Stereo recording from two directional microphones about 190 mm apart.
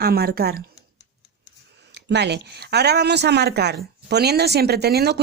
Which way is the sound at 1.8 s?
60° right (ahead or behind).